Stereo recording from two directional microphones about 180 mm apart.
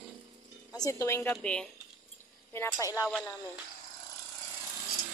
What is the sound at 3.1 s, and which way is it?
Speech, 5° left (ahead or behind).